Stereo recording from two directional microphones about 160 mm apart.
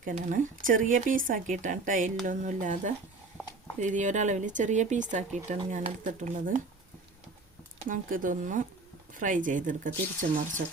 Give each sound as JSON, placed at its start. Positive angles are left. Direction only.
{"t": 0.0, "sound": "speech", "side_deg": -55}
{"t": 7.9, "sound": "speech", "side_deg": -55}